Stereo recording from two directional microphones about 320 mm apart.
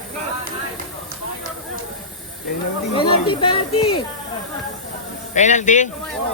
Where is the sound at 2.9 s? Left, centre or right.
Centre.